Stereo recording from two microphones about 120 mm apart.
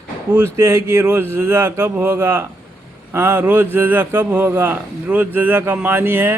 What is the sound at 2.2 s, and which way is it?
Speech, 30° right (ahead or behind).